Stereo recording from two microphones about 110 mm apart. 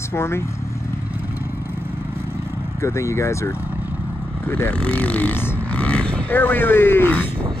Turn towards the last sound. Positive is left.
turn(degrees=15)  # may be behind; listen again after turning